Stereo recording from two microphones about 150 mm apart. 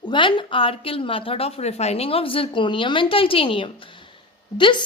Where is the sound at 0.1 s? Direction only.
30° left (ahead or behind).